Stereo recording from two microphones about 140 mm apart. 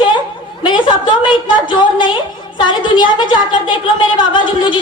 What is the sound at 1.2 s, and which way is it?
A woman's voice, 35° left (ahead or behind).